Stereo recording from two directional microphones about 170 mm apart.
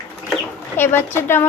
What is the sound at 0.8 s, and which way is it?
Speech, 15° left (ahead or behind).